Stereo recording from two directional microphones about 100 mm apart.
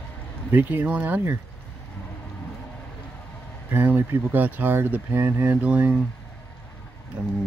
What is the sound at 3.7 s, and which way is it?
Speech, 20° right (ahead or behind).